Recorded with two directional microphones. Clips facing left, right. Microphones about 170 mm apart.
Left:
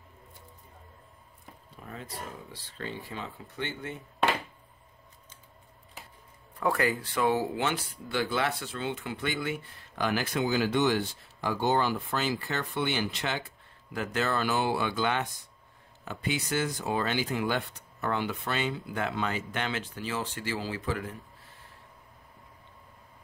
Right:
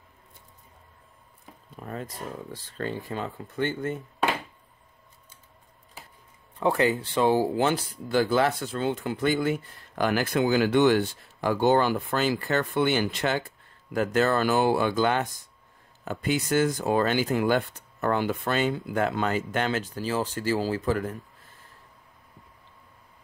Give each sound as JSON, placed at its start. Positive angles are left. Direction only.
{"t": 1.8, "sound": "speech", "side_deg": -50}
{"t": 6.6, "sound": "speech", "side_deg": -25}